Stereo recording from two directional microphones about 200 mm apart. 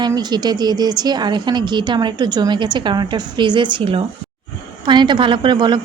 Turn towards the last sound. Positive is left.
turn(degrees=-25)  # may be behind; listen again after turning